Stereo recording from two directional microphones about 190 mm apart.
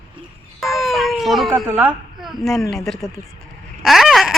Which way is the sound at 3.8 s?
Centre (ahead or behind).